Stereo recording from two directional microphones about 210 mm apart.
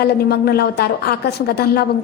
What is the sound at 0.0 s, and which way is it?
A woman's voice, 50° left (ahead or behind).